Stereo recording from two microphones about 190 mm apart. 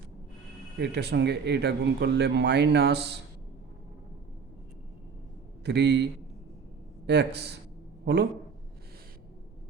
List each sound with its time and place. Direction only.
0.8 s speech: 60° right (ahead or behind)
5.6 s a woman's voice: 65° right (ahead or behind)